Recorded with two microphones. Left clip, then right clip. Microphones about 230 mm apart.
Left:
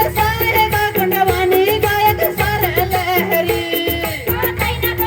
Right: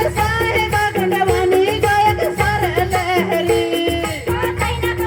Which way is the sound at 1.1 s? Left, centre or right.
Centre.